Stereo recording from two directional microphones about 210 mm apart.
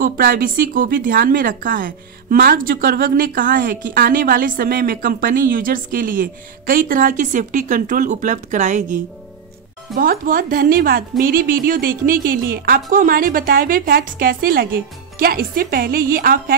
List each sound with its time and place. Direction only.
0.0 s a woman's voice: 45° right (ahead or behind)